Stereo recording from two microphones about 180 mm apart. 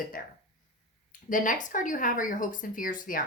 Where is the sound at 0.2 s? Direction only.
50° left (ahead or behind).